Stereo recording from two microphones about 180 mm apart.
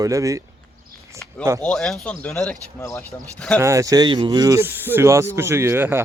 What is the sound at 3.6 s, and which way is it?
Speech, 15° right (ahead or behind).